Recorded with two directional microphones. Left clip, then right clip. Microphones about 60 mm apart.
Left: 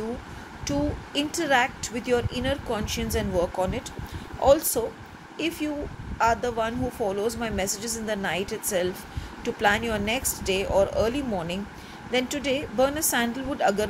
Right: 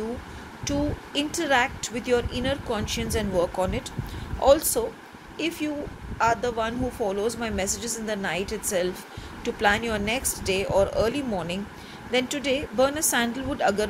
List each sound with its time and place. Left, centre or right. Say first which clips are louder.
0.7 s speech: even; left
3.0 s speech: right 1 dB; centre
5.4 s speech: even; centre